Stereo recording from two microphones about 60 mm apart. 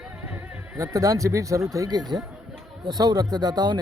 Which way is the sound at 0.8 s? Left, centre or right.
Right.